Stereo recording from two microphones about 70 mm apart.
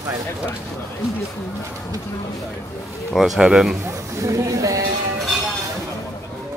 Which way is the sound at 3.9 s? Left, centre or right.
Right.